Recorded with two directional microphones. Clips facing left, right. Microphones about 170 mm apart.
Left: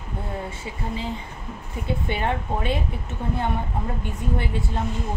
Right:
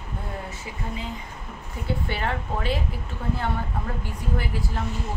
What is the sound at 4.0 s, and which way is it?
Speech, 25° left (ahead or behind).